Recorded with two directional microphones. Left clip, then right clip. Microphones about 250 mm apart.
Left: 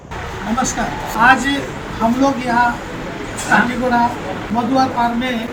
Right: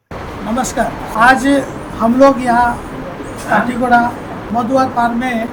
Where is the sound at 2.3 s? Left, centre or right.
Right.